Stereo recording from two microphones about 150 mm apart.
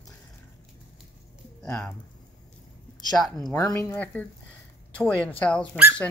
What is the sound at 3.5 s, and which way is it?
Speech, 25° left (ahead or behind).